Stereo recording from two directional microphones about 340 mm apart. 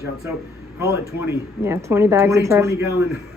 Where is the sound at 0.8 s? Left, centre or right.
Centre.